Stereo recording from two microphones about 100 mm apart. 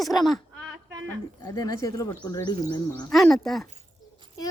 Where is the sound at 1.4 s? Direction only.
40° left (ahead or behind).